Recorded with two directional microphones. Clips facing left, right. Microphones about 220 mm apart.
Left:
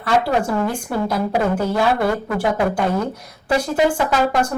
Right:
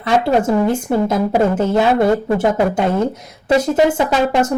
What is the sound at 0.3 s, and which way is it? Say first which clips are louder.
Speech: right 5 dB; 25° right (ahead or behind).